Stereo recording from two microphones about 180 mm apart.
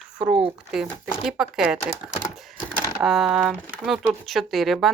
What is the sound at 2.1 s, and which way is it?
Computer keyboard, 15° left (ahead or behind).